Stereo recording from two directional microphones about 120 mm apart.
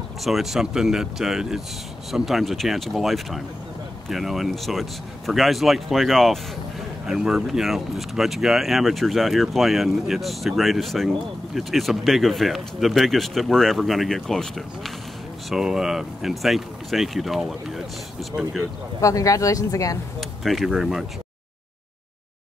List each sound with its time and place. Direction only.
0.2 s speech: centre (ahead or behind)
18.9 s speech: 30° left (ahead or behind)
20.2 s speech: centre (ahead or behind)